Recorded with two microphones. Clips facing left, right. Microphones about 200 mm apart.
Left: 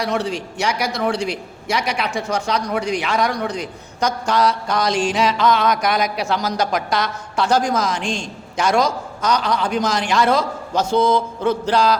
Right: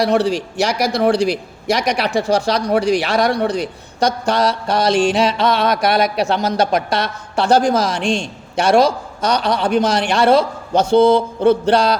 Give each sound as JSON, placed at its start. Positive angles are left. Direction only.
{"t": 0.0, "sound": "a man's voice", "side_deg": -35}
{"t": 7.9, "sound": "a man's voice", "side_deg": -65}
{"t": 8.2, "sound": "a man's voice", "side_deg": -30}